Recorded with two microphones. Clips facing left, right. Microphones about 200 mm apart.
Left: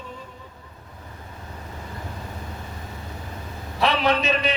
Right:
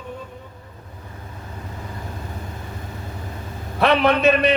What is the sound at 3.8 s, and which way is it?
Speech, 60° right (ahead or behind).